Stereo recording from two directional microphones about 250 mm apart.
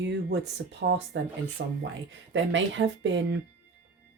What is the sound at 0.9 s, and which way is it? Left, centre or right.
Speech, right.